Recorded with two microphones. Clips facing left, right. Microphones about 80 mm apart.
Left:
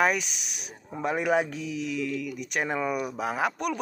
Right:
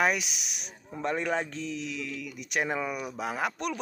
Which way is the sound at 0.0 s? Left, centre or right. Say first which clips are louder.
Left 2 dB; centre.